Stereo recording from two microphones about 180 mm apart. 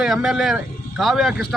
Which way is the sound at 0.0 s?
5° right (ahead or behind).